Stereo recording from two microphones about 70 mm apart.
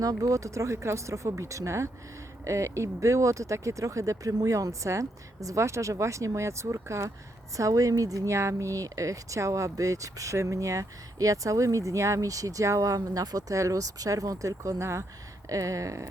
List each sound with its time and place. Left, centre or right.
0.0 s speech: right